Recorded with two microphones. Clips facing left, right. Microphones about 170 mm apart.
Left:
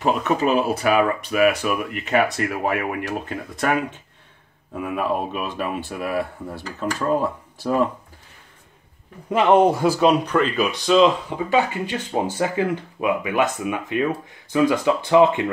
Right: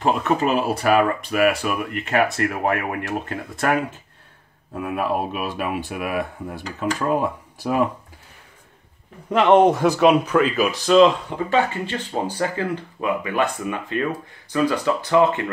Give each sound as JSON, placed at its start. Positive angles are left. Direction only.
{"t": 0.0, "sound": "speech", "side_deg": 0}
{"t": 9.3, "sound": "speech", "side_deg": 0}